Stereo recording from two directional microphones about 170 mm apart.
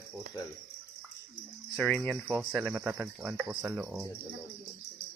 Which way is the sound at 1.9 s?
5° left (ahead or behind).